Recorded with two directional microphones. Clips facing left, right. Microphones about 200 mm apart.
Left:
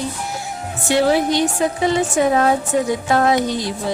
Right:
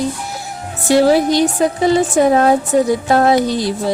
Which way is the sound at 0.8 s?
35° right (ahead or behind).